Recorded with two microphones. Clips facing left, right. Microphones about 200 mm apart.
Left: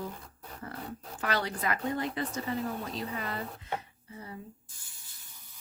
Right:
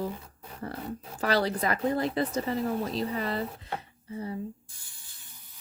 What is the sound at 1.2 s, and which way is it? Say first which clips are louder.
Speech: right 5 dB; 35° right (ahead or behind).